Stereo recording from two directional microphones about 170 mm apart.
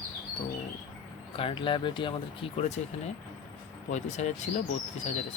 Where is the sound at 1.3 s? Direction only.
30° left (ahead or behind).